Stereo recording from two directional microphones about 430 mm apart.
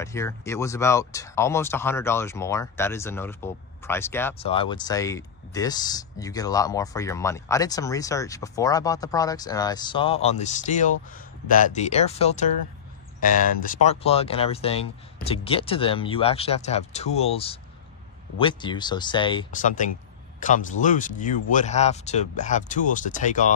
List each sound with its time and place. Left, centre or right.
0.0 s speech: centre